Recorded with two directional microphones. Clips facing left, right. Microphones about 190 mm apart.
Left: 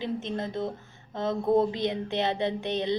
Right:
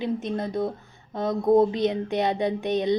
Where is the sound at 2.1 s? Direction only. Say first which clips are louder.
Right 3 dB; 15° right (ahead or behind).